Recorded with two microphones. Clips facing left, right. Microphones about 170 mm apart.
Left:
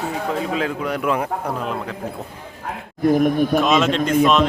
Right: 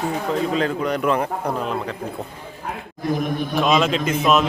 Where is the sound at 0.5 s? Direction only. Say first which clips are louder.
Right 1 dB; 5° left (ahead or behind).